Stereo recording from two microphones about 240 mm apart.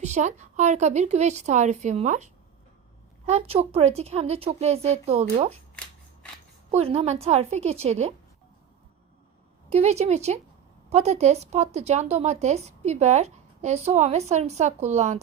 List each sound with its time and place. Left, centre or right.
0.0 s speech: right
6.7 s speech: right
9.6 s speech: right